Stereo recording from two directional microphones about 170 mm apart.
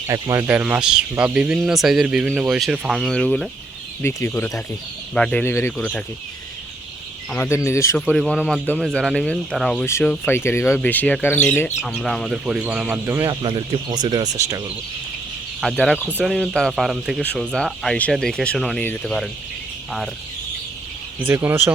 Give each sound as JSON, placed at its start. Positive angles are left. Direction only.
{"t": 0.1, "sound": "speech", "side_deg": -20}
{"t": 4.0, "sound": "speech", "side_deg": 15}
{"t": 7.3, "sound": "speech", "side_deg": 10}
{"t": 8.0, "sound": "speech", "side_deg": 0}
{"t": 11.8, "sound": "speech", "side_deg": 0}
{"t": 13.2, "sound": "speech", "side_deg": -30}
{"t": 15.6, "sound": "speech", "side_deg": 0}
{"t": 21.2, "sound": "speech", "side_deg": -15}